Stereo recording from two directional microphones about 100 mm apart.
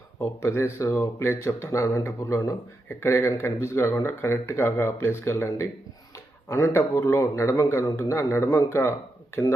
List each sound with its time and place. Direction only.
0.3 s speech: 25° left (ahead or behind)